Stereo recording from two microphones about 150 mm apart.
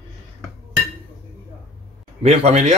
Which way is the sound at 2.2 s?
45° right (ahead or behind).